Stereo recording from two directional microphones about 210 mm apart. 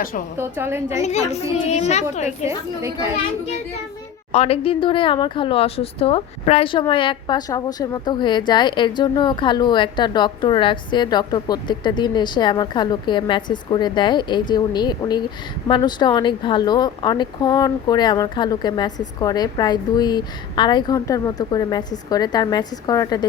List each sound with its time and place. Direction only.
0.3 s a woman's voice: 10° right (ahead or behind)
1.0 s a woman's voice: 30° left (ahead or behind)
4.3 s speech: 30° left (ahead or behind)